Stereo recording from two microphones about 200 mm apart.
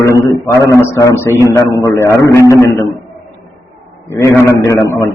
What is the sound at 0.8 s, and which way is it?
A man's voice, 15° left (ahead or behind).